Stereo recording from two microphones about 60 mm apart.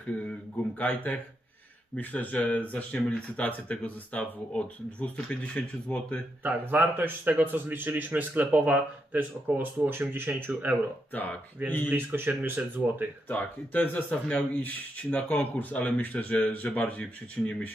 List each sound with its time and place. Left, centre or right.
0.6 s speech: left
6.4 s speech: right
11.9 s speech: right
13.3 s speech: left